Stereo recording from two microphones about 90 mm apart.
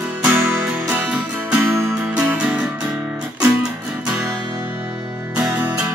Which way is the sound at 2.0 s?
15° right (ahead or behind).